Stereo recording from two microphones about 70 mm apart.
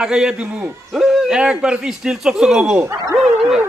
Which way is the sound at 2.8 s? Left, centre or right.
Right.